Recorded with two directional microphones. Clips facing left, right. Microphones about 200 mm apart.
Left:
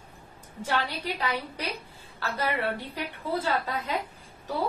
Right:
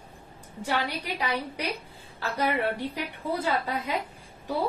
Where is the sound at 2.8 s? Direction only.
15° right (ahead or behind).